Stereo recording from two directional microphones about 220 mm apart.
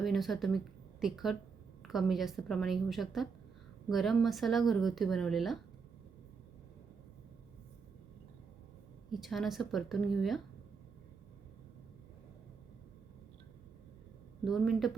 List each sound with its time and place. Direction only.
0.0 s speech: centre (ahead or behind)
9.2 s speech: centre (ahead or behind)
14.4 s speech: centre (ahead or behind)